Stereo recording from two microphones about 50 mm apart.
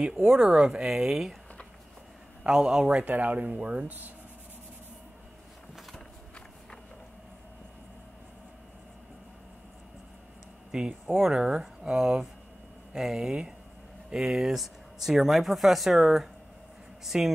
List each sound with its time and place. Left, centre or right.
0.0 s speech: centre
2.4 s speech: centre; by 4.1 s right
10.7 s speech: centre